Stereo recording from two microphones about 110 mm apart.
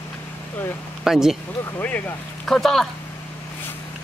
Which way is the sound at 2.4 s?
5° left (ahead or behind).